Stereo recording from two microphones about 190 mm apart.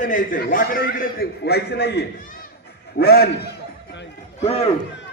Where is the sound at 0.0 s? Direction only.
45° left (ahead or behind).